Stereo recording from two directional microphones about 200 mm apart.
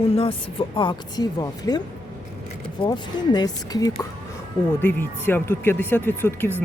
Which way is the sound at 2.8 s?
20° left (ahead or behind).